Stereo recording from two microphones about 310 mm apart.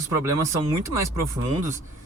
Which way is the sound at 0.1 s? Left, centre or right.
Centre.